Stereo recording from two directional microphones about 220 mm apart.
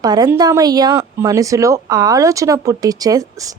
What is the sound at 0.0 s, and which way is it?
Speech, 15° right (ahead or behind).